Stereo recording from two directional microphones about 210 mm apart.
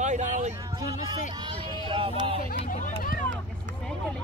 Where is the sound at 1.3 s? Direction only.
20° right (ahead or behind).